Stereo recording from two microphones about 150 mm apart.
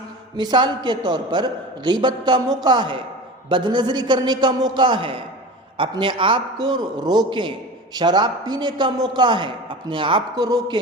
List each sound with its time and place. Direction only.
0.3 s a man's voice: 30° right (ahead or behind)